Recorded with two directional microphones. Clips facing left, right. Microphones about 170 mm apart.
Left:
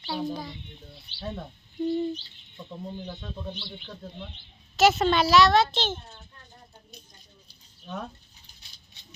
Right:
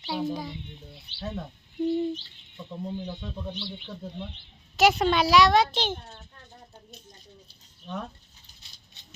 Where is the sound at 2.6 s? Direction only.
Centre (ahead or behind).